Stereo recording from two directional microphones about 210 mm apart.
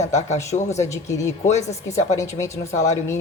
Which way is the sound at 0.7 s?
15° left (ahead or behind).